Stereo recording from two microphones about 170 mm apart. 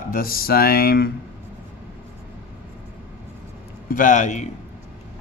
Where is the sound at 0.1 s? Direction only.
60° left (ahead or behind).